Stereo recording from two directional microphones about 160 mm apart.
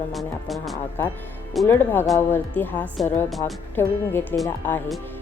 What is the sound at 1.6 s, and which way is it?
A woman's voice, 15° left (ahead or behind).